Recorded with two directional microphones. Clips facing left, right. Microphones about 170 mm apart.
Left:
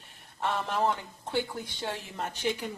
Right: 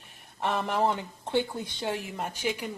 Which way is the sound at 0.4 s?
15° right (ahead or behind).